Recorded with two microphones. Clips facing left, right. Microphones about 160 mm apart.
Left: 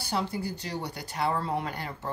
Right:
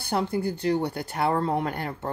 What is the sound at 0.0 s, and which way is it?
Speech, 55° right (ahead or behind).